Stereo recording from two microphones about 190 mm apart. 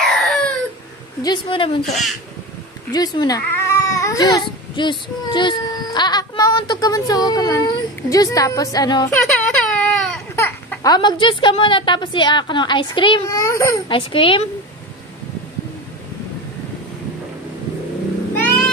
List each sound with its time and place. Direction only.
0.0 s a sound: centre (ahead or behind)
1.2 s a woman's voice: 25° left (ahead or behind)
1.9 s speech: centre (ahead or behind)
2.9 s speech: 20° left (ahead or behind)
9.2 s a sound: 5° left (ahead or behind)
10.3 s a woman's voice: 15° left (ahead or behind)
13.9 s a woman's voice: 30° left (ahead or behind)